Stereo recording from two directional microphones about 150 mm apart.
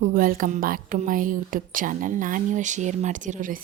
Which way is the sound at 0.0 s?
70° right (ahead or behind).